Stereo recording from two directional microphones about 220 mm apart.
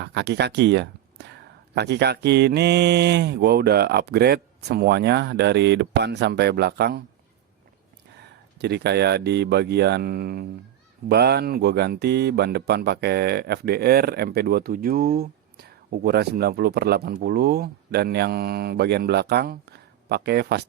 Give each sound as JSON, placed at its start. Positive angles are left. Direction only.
{"t": 0.0, "sound": "speech", "side_deg": -50}
{"t": 8.2, "sound": "speech", "side_deg": -50}